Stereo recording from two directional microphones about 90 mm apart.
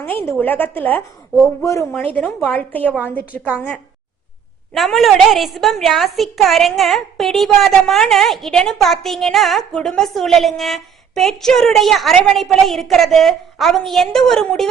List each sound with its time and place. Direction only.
0.0 s a woman's voice: 25° left (ahead or behind)
2.1 s a woman's voice: 15° left (ahead or behind)
3.3 s a woman's voice: 20° right (ahead or behind)
4.7 s a woman's voice: centre (ahead or behind)